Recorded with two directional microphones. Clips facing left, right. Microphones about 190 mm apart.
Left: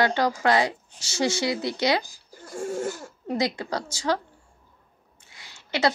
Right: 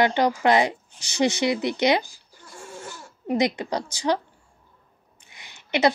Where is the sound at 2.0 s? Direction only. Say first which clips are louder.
Right 1 dB; 45° left (ahead or behind).